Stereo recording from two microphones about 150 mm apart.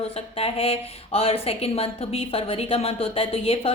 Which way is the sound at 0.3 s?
40° left (ahead or behind).